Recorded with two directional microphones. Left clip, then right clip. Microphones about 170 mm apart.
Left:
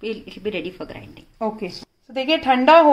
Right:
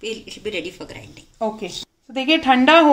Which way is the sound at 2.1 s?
5° left (ahead or behind).